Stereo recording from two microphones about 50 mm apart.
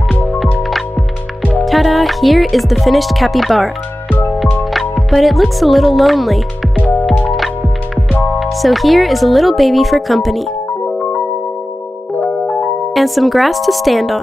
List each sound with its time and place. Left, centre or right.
0.6 s music: centre
2.5 s speech: centre
4.7 s speech: centre
7.1 s music: centre
8.4 s speech: centre
12.2 s music: left
12.9 s speech: centre